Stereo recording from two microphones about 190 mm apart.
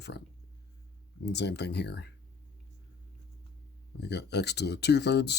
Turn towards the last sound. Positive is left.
turn(degrees=60)  # may be behind; listen again after turning